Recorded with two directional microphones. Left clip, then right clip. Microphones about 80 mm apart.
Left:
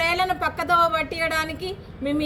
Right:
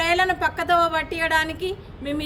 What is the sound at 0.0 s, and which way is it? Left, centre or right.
A woman's voice, right.